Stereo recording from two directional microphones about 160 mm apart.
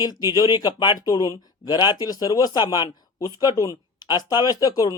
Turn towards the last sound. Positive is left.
turn(degrees=25)  # may be behind; listen again after turning